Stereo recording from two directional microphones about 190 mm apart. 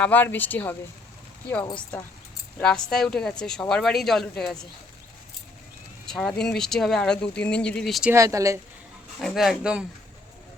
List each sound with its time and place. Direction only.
0.0 s speech: 10° left (ahead or behind)
2.6 s speech: 5° left (ahead or behind)
6.1 s speech: centre (ahead or behind)
8.1 s speech: 15° right (ahead or behind)
9.2 s speech: centre (ahead or behind)